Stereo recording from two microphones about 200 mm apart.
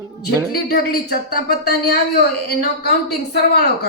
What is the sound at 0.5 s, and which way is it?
A woman's voice, 50° left (ahead or behind).